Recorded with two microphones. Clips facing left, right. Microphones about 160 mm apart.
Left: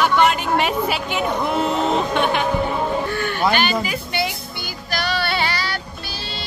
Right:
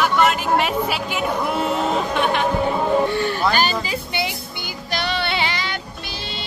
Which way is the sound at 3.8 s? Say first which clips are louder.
Left 1 dB; 20° right (ahead or behind).